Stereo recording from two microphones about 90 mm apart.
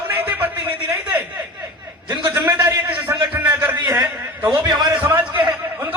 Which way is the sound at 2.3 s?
20° right (ahead or behind).